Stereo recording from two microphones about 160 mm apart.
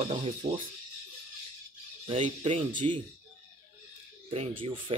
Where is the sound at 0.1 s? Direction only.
35° right (ahead or behind).